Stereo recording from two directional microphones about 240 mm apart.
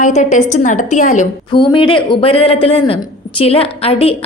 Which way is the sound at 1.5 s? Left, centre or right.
Centre.